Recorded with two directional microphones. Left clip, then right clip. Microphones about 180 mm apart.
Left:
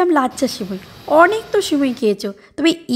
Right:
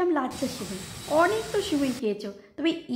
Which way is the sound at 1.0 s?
40° left (ahead or behind).